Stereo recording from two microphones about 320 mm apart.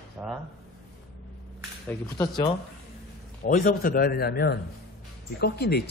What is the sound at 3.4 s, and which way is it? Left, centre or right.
A man's voice, left.